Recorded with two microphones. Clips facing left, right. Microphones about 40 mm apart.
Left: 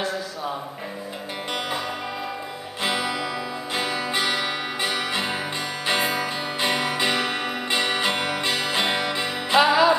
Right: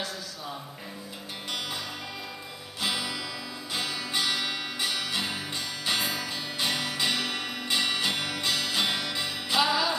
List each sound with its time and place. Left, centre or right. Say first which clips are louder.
2.8 s music: left 6 dB; left